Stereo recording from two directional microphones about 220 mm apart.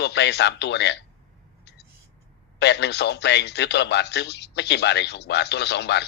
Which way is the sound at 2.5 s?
50° left (ahead or behind).